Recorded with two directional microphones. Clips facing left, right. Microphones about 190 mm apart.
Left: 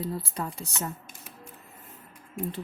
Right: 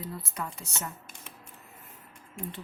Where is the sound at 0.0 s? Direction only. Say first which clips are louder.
Left 5 dB; 30° left (ahead or behind).